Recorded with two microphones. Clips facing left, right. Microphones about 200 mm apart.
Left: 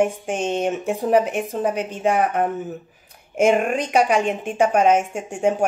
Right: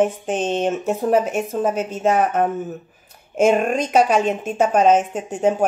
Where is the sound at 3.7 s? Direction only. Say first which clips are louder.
Right 2 dB; 15° left (ahead or behind).